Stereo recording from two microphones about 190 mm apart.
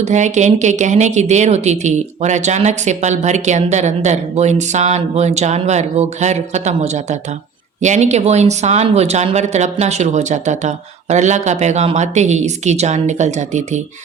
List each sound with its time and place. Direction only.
0.0 s speech: 40° right (ahead or behind)